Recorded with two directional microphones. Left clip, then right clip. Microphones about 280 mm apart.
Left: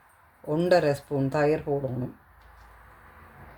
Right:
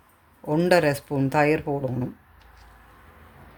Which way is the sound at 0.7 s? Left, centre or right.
Right.